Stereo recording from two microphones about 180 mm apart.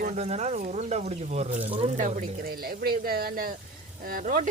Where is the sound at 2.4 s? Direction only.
55° right (ahead or behind).